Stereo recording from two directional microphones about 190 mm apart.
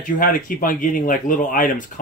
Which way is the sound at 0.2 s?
45° left (ahead or behind).